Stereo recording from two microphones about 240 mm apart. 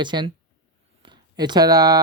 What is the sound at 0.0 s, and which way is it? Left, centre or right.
Speech, centre.